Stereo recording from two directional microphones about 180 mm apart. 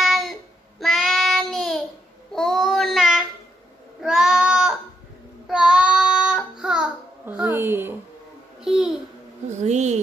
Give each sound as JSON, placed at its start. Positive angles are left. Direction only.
{"t": 0.0, "sound": "child singing", "side_deg": 0}
{"t": 8.6, "sound": "babbling", "side_deg": -5}
{"t": 9.6, "sound": "a sound", "side_deg": -40}